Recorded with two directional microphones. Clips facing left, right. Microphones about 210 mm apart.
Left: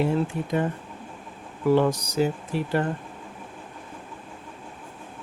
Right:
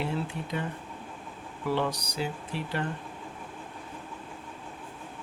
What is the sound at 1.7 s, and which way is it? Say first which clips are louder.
Speech: left 9 dB; 45° left (ahead or behind).